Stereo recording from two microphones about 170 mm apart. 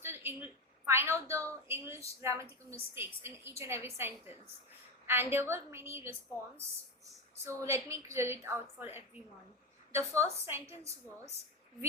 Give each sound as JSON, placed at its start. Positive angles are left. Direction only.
{"t": 0.0, "sound": "a sound", "side_deg": -15}
{"t": 1.6, "sound": "a woman's voice", "side_deg": -15}
{"t": 7.6, "sound": "a woman's voice", "side_deg": -15}